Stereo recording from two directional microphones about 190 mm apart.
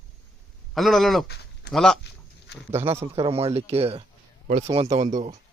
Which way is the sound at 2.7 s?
35° right (ahead or behind).